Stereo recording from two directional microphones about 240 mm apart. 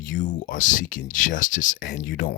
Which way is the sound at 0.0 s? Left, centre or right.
Left.